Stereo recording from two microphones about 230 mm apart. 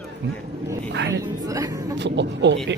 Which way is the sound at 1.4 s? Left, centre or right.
Centre.